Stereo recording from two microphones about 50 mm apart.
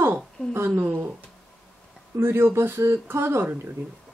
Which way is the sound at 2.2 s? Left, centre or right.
Right.